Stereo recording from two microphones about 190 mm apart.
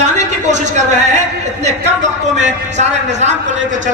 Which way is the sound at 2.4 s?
35° right (ahead or behind).